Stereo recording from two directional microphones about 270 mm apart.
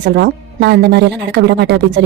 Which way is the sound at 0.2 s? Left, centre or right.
Right.